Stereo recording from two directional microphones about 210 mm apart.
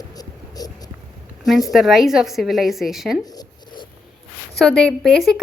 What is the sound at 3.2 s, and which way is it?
Zipper, 20° left (ahead or behind).